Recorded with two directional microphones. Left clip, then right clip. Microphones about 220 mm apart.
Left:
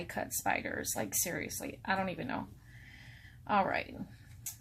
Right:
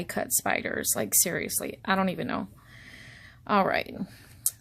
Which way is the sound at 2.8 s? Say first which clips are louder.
Right 7 dB; 55° right (ahead or behind).